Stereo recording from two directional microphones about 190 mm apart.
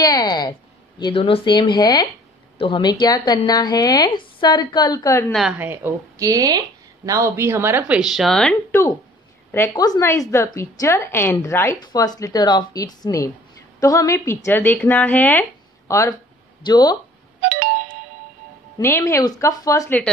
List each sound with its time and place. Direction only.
0.0 s a woman's voice: 20° left (ahead or behind)
5.3 s a woman's voice: 5° right (ahead or behind)
9.5 s a woman's voice: 15° left (ahead or behind)
17.4 s ringtone: 45° right (ahead or behind)
18.8 s a woman's voice: 15° left (ahead or behind)